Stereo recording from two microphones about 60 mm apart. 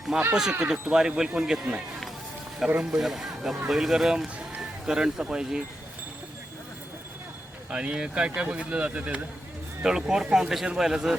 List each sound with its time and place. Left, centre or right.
0.1 s speech: centre
2.9 s speech: centre
7.7 s speech: centre
9.8 s speech: centre
10.2 s speech: centre
10.7 s speech: centre